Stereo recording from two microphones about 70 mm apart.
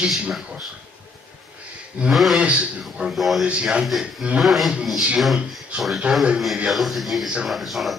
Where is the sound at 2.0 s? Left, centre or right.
Centre.